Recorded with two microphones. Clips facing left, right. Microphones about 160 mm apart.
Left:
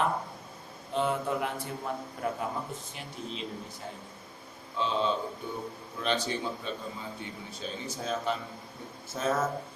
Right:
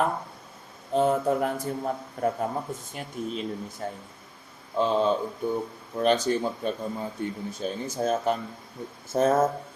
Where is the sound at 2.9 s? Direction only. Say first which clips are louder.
Right 7 dB; 50° right (ahead or behind).